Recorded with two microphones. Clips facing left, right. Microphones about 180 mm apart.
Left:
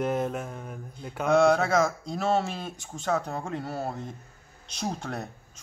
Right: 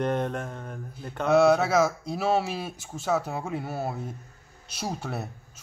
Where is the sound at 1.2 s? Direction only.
5° right (ahead or behind).